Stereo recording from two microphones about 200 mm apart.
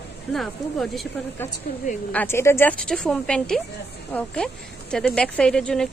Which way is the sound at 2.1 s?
10° left (ahead or behind).